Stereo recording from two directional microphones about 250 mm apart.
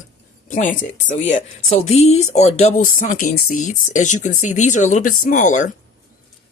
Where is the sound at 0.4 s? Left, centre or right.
Left.